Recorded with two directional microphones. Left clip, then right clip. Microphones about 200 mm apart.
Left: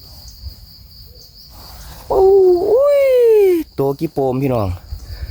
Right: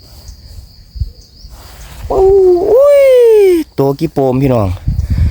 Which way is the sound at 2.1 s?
35° right (ahead or behind).